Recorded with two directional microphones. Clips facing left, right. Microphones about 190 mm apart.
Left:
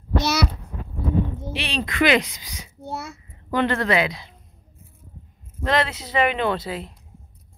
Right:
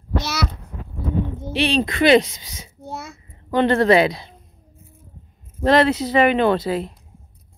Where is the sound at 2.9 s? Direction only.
5° left (ahead or behind).